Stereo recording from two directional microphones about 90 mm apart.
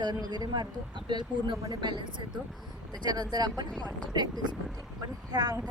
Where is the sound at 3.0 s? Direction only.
50° right (ahead or behind).